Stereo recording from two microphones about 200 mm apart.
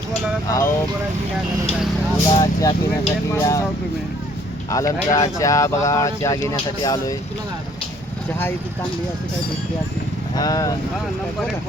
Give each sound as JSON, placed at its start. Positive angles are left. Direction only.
{"t": 0.1, "sound": "speech", "side_deg": 15}
{"t": 2.4, "sound": "speech", "side_deg": 20}
{"t": 4.7, "sound": "speech", "side_deg": 15}
{"t": 10.3, "sound": "speech", "side_deg": 20}